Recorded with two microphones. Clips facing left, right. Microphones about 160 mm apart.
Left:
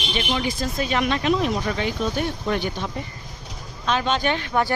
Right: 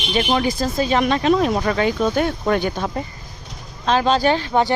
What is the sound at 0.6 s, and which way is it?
Speech, 35° right (ahead or behind).